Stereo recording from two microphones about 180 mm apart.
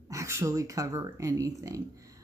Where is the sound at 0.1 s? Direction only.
15° right (ahead or behind).